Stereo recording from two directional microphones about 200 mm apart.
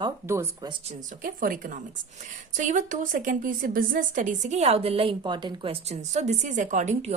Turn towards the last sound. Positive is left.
turn(degrees=-35)  # may be behind; listen again after turning